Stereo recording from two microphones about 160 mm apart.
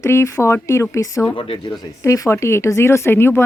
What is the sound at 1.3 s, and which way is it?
A woman's voice, 30° left (ahead or behind).